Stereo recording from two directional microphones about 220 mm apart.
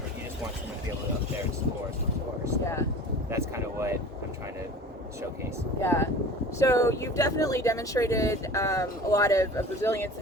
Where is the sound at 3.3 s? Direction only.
10° right (ahead or behind).